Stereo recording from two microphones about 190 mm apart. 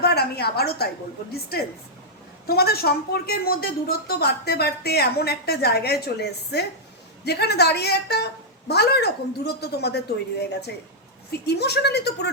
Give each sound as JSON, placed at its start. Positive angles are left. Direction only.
{"t": 0.0, "sound": "a woman's voice", "side_deg": 60}
{"t": 11.3, "sound": "a woman's voice", "side_deg": 60}